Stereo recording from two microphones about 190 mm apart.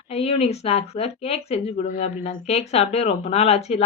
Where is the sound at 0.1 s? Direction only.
30° left (ahead or behind).